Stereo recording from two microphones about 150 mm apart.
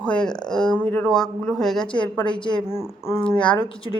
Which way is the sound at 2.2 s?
30° left (ahead or behind).